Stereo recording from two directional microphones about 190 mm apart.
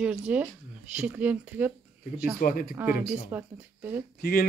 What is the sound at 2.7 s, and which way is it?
Speech, 10° right (ahead or behind).